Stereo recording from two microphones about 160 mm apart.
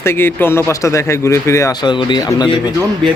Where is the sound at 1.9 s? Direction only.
30° left (ahead or behind).